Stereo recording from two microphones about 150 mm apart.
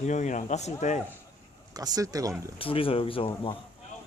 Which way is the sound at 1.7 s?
25° right (ahead or behind).